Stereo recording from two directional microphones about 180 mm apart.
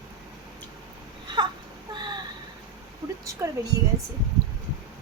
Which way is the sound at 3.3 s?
15° right (ahead or behind).